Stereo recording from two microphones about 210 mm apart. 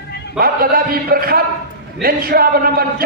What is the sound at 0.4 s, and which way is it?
A man's voice, 45° right (ahead or behind).